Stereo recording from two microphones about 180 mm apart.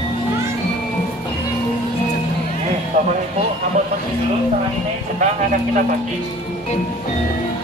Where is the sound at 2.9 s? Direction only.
45° right (ahead or behind).